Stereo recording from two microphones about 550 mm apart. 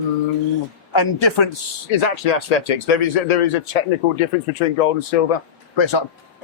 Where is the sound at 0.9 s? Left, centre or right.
Left.